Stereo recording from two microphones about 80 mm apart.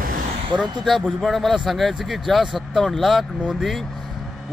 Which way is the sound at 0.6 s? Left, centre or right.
Centre.